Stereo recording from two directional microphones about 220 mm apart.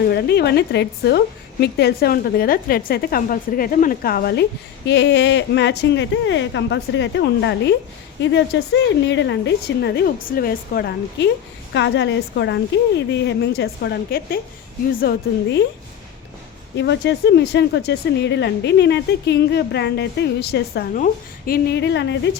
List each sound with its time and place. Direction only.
0.1 s speech: 45° left (ahead or behind)
16.7 s speech: 50° left (ahead or behind)